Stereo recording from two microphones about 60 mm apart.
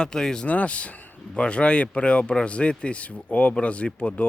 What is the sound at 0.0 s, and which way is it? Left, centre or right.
Speech, centre.